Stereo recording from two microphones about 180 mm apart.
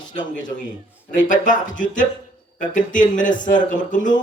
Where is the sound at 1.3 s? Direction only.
45° left (ahead or behind).